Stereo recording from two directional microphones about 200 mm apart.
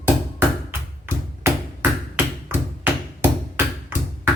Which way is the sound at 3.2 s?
10° right (ahead or behind).